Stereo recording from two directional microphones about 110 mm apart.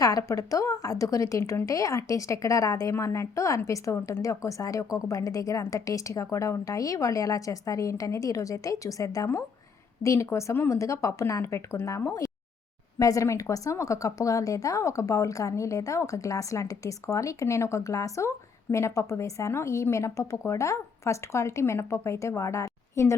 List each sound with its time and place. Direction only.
0.0 s a woman's voice: 30° left (ahead or behind)